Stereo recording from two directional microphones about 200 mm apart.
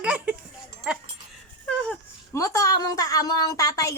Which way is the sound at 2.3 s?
15° left (ahead or behind).